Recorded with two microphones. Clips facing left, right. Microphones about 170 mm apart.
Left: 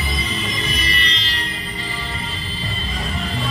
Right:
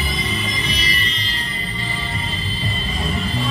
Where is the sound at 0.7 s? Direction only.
55° left (ahead or behind); by 1.4 s 80° left.